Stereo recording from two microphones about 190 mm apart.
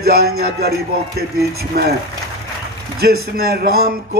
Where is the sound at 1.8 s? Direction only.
55° right (ahead or behind).